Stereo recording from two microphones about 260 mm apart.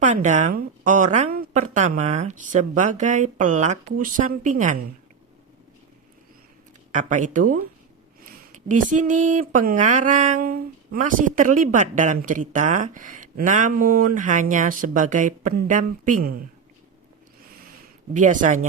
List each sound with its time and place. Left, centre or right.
0.0 s speech: right
6.9 s speech: right
18.1 s speech: right